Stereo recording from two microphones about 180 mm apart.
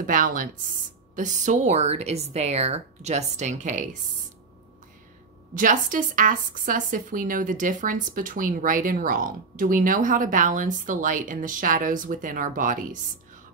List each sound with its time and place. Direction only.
0.0 s speech: 50° right (ahead or behind)
5.5 s speech: 45° right (ahead or behind)